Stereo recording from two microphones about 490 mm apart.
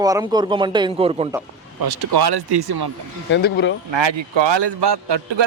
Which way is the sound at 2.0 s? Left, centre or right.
Right.